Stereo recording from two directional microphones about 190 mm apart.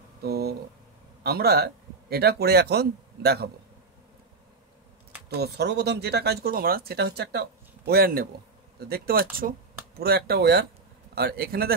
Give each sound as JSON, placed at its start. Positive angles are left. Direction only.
{"t": 0.2, "sound": "speech", "side_deg": -55}
{"t": 5.4, "sound": "speech", "side_deg": -60}